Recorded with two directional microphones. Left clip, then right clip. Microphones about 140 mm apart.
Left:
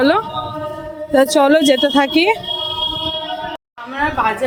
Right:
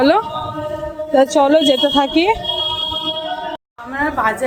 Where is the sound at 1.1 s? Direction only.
25° left (ahead or behind).